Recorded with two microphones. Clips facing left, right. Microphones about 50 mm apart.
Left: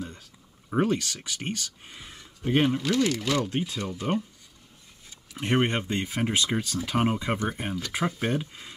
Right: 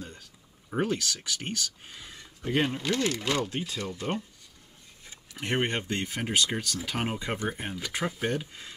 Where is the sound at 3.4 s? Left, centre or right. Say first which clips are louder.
Left 3 dB; left.